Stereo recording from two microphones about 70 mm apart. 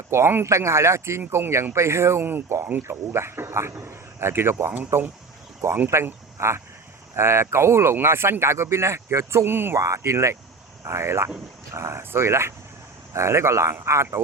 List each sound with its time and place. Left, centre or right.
0.1 s speech: right
9.7 s speech: right